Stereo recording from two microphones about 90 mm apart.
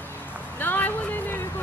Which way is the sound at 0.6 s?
20° left (ahead or behind).